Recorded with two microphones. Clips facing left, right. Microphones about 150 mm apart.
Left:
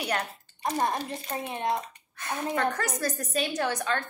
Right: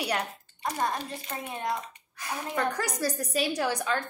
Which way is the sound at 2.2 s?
10° right (ahead or behind).